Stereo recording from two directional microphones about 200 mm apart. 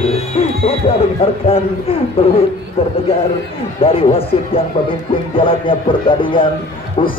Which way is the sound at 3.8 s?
30° left (ahead or behind).